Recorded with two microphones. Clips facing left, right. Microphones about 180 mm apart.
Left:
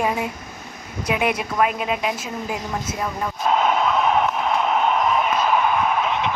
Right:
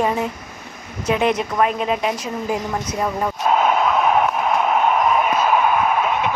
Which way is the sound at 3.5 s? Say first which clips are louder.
Right 2 dB; 45° right (ahead or behind).